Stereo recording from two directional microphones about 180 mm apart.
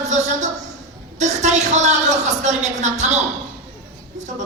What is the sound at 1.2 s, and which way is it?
A woman's voice, 40° right (ahead or behind).